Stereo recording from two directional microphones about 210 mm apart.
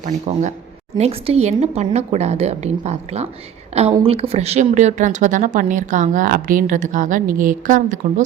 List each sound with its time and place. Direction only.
0.0 s speech: 35° right (ahead or behind)